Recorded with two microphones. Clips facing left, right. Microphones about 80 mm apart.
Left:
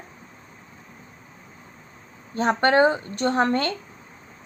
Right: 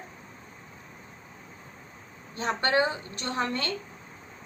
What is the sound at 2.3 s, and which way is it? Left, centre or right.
A woman's voice, left.